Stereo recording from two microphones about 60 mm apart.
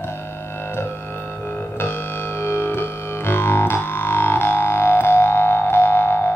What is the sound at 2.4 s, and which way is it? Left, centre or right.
Music, left.